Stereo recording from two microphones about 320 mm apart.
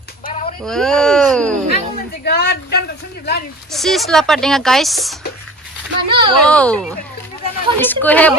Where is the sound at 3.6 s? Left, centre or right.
Centre.